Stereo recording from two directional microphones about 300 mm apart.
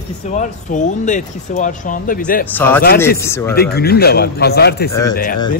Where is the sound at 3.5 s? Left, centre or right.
Left.